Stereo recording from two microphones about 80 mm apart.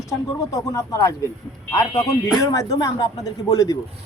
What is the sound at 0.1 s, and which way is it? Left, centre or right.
Speech, left.